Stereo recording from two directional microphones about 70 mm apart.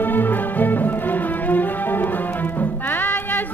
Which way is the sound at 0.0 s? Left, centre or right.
Left.